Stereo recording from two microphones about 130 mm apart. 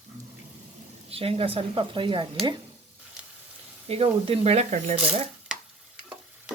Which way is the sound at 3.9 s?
50° right (ahead or behind).